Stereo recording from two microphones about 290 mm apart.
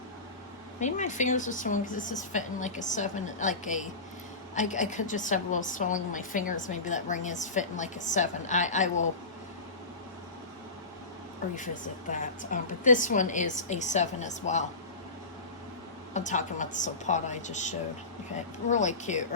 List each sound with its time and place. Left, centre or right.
0.8 s a woman's voice: left
11.5 s a woman's voice: left
16.1 s a woman's voice: left